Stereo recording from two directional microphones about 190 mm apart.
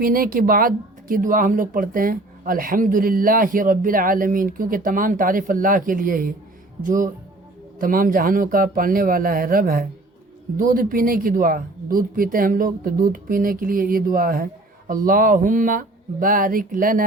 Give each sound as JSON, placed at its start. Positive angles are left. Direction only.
{"t": 0.0, "sound": "speech", "side_deg": -50}